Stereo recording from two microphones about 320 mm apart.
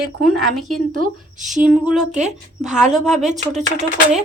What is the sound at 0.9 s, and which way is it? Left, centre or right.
Speech, right.